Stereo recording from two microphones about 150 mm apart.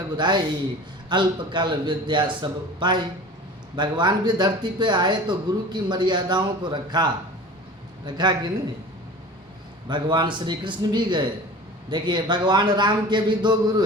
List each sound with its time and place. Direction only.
0.2 s speech: 30° right (ahead or behind)
9.9 s a man's voice: 30° right (ahead or behind)